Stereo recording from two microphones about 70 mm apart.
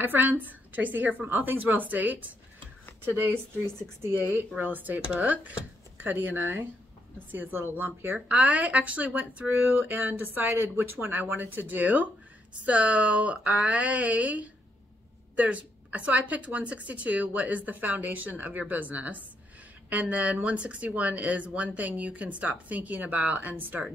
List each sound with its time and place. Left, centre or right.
0.0 s speech: right
4.6 s speech: right
8.3 s speech: centre